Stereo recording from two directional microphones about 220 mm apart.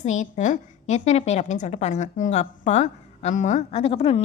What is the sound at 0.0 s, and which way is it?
A woman's voice, 30° left (ahead or behind).